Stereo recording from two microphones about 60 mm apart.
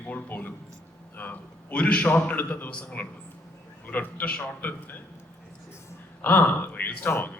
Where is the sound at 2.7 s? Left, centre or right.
Left.